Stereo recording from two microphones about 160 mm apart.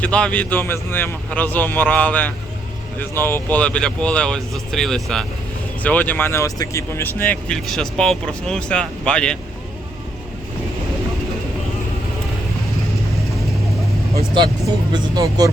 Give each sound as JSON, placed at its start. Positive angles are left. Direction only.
{"t": 0.0, "sound": "a man's voice", "side_deg": 5}
{"t": 14.9, "sound": "speech", "side_deg": -25}